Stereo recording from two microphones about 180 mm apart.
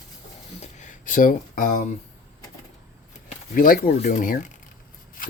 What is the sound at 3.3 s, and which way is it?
Speech, 50° left (ahead or behind).